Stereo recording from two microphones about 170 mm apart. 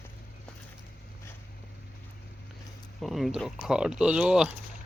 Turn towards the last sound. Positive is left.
turn(degrees=-5)  # may be behind; listen again after turning